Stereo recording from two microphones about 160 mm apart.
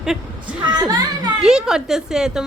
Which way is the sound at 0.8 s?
25° right (ahead or behind).